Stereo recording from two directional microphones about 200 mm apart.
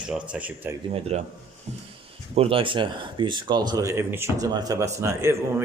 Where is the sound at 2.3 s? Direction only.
30° right (ahead or behind).